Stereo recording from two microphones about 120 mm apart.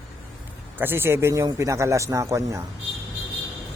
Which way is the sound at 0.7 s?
20° right (ahead or behind).